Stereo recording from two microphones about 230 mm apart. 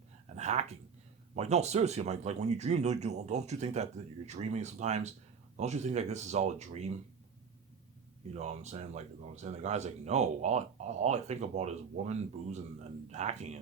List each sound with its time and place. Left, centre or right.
0.3 s speech: right
8.4 s speech: right